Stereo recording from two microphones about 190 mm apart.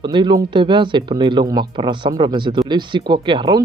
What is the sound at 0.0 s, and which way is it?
Speech, 25° right (ahead or behind).